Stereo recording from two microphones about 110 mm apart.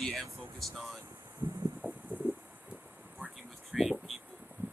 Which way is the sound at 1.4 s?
20° right (ahead or behind).